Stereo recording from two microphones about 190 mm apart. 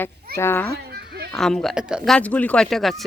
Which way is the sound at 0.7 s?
55° right (ahead or behind).